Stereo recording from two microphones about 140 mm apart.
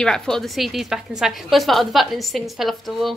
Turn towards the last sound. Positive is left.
turn(degrees=0)  # may be behind; listen again after turning